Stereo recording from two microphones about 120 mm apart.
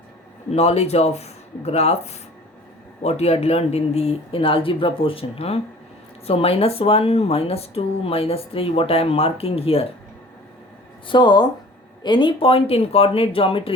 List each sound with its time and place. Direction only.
0.5 s speech: 60° left (ahead or behind)
11.1 s speech: 40° left (ahead or behind)